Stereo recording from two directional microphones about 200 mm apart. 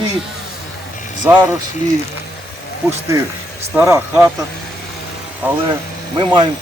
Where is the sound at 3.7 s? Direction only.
15° right (ahead or behind).